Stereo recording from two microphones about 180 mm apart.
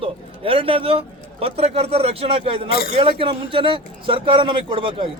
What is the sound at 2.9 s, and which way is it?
A man's voice, 30° right (ahead or behind).